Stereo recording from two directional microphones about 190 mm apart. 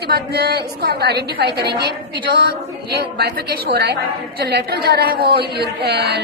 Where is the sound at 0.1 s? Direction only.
55° right (ahead or behind).